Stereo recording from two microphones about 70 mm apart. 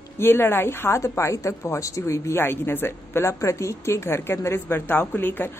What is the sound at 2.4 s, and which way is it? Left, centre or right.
A woman's voice, left.